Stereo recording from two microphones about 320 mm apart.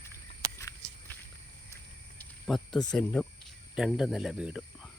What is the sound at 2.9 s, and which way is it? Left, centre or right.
Speech, centre.